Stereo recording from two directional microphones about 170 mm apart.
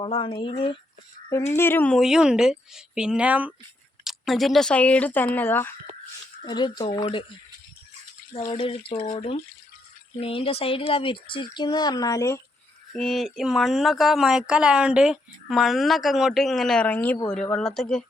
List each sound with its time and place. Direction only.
0.0 s speech: 30° left (ahead or behind)
1.5 s speech: 10° left (ahead or behind)
2.0 s speech: 5° right (ahead or behind); by 5.7 s 10° left (ahead or behind)
6.4 s speech: 25° left (ahead or behind)
8.4 s speech: 30° left (ahead or behind)
12.9 s speech: centre (ahead or behind)